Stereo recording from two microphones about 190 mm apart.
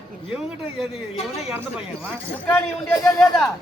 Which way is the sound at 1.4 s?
5° right (ahead or behind).